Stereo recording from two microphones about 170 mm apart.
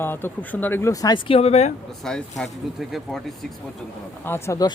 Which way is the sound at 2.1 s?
5° left (ahead or behind).